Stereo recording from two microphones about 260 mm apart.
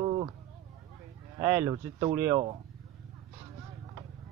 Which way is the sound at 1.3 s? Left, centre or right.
Centre.